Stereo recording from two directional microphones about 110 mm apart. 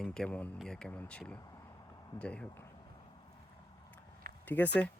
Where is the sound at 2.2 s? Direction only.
10° left (ahead or behind).